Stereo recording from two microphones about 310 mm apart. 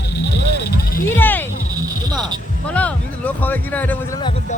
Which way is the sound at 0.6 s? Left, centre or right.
Left.